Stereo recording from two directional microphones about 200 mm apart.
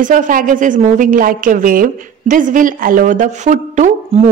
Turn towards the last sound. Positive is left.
turn(degrees=-35)  # may be behind; listen again after turning